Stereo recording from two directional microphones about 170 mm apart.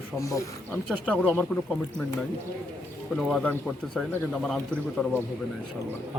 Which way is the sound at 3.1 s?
Centre (ahead or behind).